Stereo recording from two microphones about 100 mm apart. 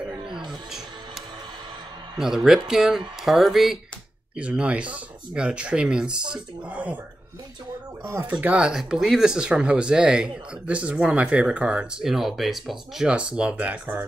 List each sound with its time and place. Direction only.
2.1 s speech: 5° right (ahead or behind)
4.4 s speech: 10° right (ahead or behind)
8.0 s speech: 25° right (ahead or behind)
8.3 s speech: 15° right (ahead or behind)